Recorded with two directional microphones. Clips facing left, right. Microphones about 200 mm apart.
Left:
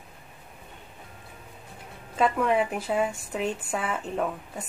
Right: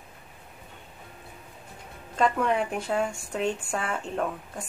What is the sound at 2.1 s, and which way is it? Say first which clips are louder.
Speech: left 1 dB; 5° left (ahead or behind).